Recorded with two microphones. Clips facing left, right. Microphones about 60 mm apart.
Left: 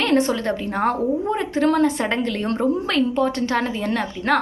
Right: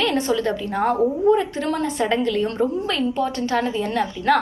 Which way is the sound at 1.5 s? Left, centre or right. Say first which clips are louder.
Left 6 dB; left.